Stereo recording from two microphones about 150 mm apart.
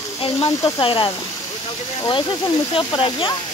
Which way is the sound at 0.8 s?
35° left (ahead or behind).